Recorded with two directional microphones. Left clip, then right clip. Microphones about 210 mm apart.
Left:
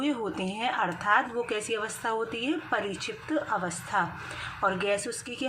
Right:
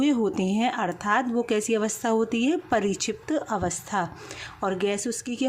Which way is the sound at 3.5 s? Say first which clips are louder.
Right 2 dB; 60° right (ahead or behind).